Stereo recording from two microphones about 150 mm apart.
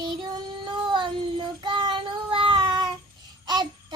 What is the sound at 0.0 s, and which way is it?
Child singing, 30° right (ahead or behind).